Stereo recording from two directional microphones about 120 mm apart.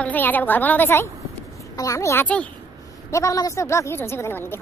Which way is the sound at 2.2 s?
10° left (ahead or behind).